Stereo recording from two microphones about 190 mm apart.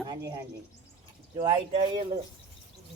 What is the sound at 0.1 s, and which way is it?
Speech, 15° right (ahead or behind).